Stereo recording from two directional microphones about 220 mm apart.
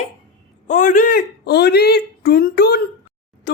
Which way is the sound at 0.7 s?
35° left (ahead or behind).